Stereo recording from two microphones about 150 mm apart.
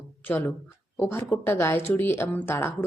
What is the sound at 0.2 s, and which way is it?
A woman's voice, 10° left (ahead or behind).